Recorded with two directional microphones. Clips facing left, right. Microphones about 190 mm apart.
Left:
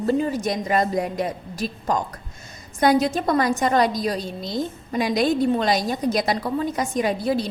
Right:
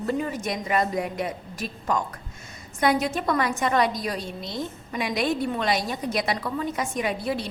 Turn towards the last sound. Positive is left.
turn(degrees=40)  # may be behind; listen again after turning